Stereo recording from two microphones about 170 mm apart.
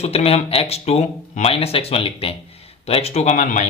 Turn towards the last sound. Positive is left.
turn(degrees=45)  # may be behind; listen again after turning